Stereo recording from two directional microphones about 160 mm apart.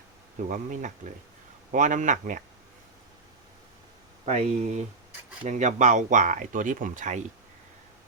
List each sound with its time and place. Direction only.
0.5 s speech: 55° right (ahead or behind)
4.3 s speech: 50° right (ahead or behind)